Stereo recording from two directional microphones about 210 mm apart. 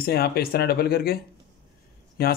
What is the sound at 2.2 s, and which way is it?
Speech, 45° left (ahead or behind).